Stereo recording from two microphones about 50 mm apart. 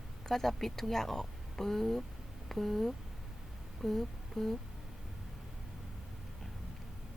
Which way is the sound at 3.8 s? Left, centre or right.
Centre.